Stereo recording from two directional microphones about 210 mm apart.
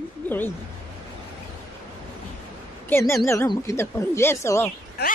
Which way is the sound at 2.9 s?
10° left (ahead or behind).